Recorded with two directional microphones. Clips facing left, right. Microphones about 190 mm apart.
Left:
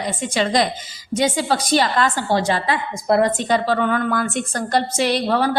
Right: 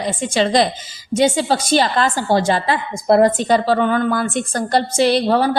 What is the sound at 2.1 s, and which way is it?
Speech, 45° right (ahead or behind).